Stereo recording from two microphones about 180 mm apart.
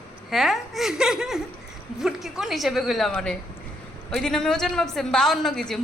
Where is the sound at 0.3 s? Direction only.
Centre (ahead or behind).